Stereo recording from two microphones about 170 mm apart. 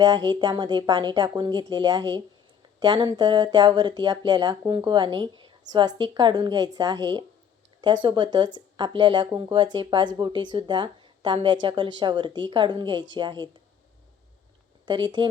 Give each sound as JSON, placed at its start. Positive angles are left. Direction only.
{"t": 0.0, "sound": "speech", "side_deg": -25}
{"t": 14.8, "sound": "speech", "side_deg": -25}